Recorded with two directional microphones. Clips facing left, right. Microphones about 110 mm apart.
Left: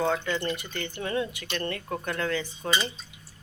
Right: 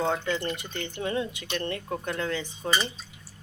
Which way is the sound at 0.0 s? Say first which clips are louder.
Even; 20° right (ahead or behind).